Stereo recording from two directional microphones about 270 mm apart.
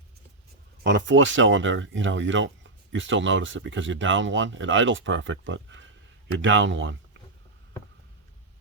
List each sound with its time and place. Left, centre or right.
0.9 s speech: right